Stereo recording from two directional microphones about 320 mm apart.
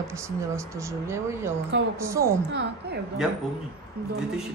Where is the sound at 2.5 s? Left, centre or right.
Right.